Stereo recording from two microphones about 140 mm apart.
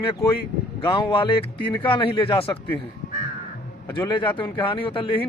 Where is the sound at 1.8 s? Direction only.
35° left (ahead or behind).